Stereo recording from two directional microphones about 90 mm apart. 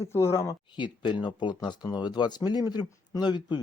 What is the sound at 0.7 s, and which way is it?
Speech, 60° left (ahead or behind).